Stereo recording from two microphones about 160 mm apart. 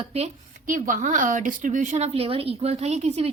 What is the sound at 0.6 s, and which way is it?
A woman's voice, 55° right (ahead or behind).